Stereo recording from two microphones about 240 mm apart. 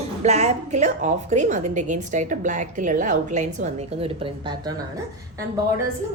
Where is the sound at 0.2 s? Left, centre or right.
Right.